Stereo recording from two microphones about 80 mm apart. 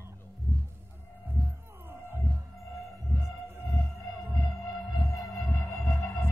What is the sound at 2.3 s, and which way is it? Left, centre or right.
Music, centre.